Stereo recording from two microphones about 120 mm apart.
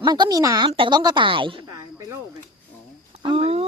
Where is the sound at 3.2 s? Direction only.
50° right (ahead or behind).